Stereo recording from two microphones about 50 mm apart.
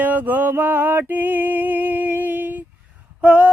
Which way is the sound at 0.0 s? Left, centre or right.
Right.